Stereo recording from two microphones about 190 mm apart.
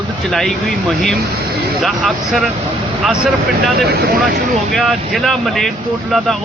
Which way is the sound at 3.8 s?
55° right (ahead or behind).